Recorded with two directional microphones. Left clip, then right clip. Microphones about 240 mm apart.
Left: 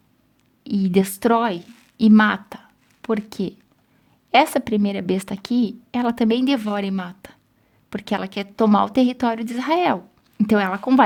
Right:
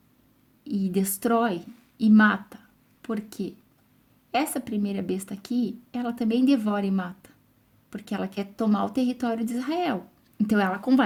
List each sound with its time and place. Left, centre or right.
0.6 s a woman's voice: left